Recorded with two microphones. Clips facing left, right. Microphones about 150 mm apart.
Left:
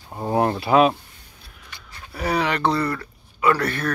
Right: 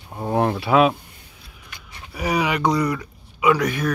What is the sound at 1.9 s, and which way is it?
Speech, 10° right (ahead or behind).